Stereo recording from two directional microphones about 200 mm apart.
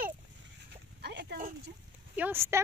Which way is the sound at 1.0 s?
55° right (ahead or behind).